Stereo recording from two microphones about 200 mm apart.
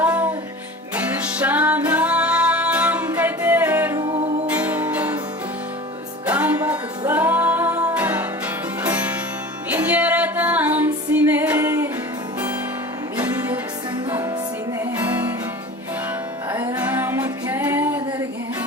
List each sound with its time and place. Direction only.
0.0 s music: 5° right (ahead or behind)
4.0 s music: 30° right (ahead or behind)
4.4 s music: 5° right (ahead or behind)
6.2 s music: 5° right (ahead or behind)
13.1 s music: 10° right (ahead or behind)
16.5 s music: 10° right (ahead or behind)